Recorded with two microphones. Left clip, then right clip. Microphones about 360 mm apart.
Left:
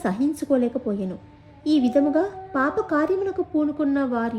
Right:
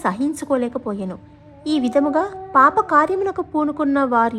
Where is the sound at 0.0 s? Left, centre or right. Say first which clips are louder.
Right 3 dB; centre.